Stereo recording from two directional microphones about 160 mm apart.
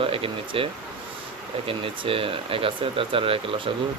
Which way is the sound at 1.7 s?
35° right (ahead or behind).